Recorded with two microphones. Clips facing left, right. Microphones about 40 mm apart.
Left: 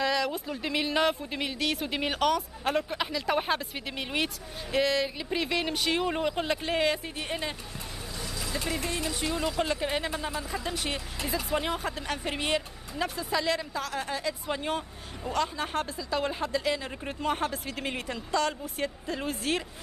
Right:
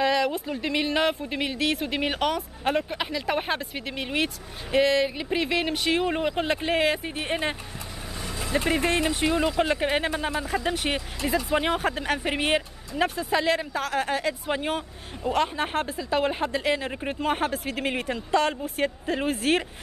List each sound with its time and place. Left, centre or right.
0.0 s speech: centre
8.2 s vehicle: right
9.0 s speech: right; by 18.0 s centre
18.0 s speech: right